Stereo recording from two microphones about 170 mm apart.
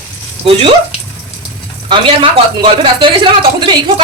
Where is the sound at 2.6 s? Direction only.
30° right (ahead or behind).